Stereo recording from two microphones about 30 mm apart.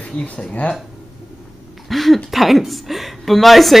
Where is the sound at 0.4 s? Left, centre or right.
Left.